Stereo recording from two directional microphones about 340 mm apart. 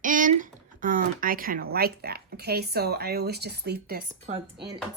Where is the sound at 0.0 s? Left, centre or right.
Right.